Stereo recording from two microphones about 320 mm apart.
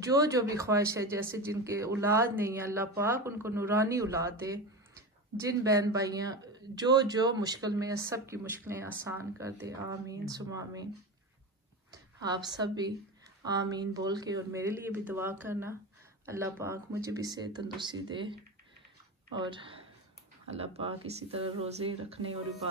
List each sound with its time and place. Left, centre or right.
0.0 s speech: centre
11.9 s a woman's voice: centre
22.2 s speech: right